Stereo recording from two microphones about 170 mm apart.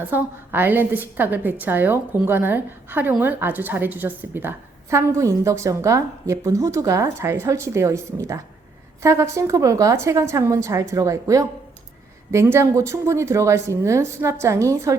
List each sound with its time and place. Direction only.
0.1 s a woman's voice: 10° right (ahead or behind)